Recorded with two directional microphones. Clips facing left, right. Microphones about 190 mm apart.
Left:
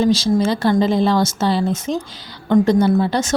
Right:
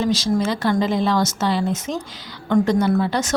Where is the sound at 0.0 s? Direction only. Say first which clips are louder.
Left 4 dB; 30° left (ahead or behind).